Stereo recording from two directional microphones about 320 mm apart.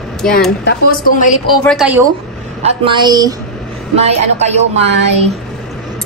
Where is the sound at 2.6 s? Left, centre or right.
Centre.